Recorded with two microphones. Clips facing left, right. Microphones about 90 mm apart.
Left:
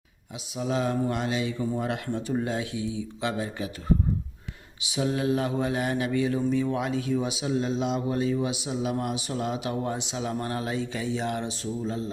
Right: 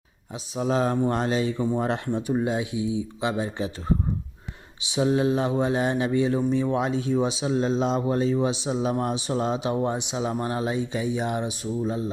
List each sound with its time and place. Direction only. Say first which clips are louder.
0.5 s a man's voice: right 3 dB; 40° right (ahead or behind)
2.1 s speech: right 3 dB; 20° right (ahead or behind)
4.9 s a man's voice: right 4 dB; 25° right (ahead or behind)